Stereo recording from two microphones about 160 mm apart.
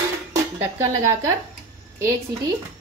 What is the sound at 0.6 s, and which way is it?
Speech, 20° right (ahead or behind).